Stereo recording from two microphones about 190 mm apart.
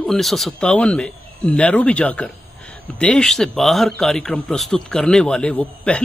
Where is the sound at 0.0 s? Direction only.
Centre (ahead or behind).